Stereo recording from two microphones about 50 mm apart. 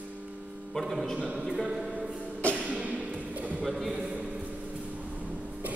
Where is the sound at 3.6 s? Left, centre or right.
Centre.